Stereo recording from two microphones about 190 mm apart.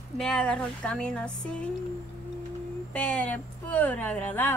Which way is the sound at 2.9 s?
10° left (ahead or behind).